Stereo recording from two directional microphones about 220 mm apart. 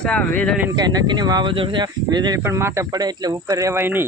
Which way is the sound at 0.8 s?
20° right (ahead or behind).